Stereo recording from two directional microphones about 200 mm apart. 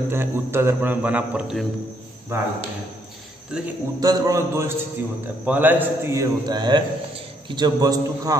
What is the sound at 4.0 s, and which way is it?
A man's voice, 15° right (ahead or behind).